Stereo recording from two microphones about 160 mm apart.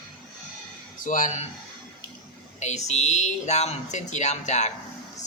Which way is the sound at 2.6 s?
45° left (ahead or behind).